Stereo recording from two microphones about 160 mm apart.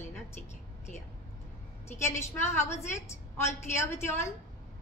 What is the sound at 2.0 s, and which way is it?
A woman's voice, 15° left (ahead or behind).